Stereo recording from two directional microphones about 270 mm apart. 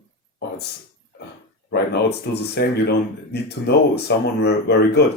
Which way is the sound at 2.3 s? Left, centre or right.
Left.